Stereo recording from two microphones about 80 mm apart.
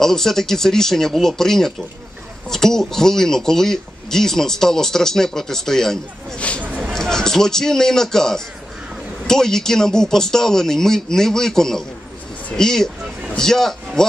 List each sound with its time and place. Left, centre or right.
0.0 s speech: centre
6.6 s a sound: right
6.9 s a man's voice: centre